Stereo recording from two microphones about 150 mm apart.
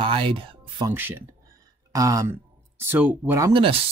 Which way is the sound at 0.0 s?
35° right (ahead or behind).